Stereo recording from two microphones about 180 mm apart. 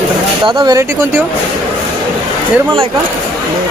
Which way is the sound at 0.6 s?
20° right (ahead or behind).